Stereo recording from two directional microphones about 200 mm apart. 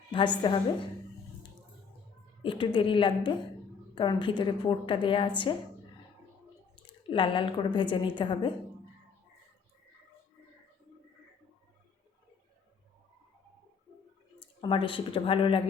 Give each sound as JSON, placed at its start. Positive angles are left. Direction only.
{"t": 0.4, "sound": "a woman's voice", "side_deg": 25}
{"t": 2.4, "sound": "a woman's voice", "side_deg": 25}
{"t": 6.8, "sound": "a woman's voice", "side_deg": 25}
{"t": 14.3, "sound": "speech", "side_deg": 25}